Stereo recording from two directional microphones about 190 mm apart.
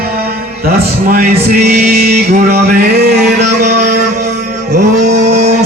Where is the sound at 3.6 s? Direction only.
55° right (ahead or behind).